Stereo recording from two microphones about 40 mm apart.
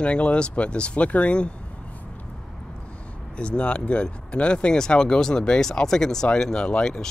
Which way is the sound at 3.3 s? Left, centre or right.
Left.